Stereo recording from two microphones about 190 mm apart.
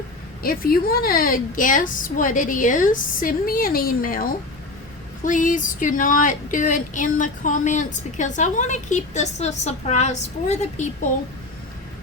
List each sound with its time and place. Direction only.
0.4 s a woman's voice: 50° left (ahead or behind)